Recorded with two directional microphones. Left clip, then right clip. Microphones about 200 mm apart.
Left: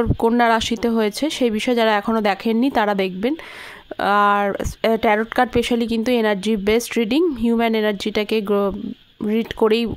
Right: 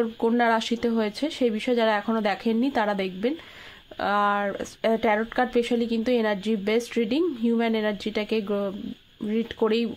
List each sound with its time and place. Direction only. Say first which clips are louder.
0.0 s speech: left 6 dB; 40° left (ahead or behind)